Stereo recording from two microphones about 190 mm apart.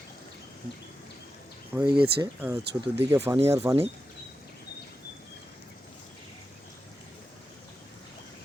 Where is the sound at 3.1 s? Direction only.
10° right (ahead or behind).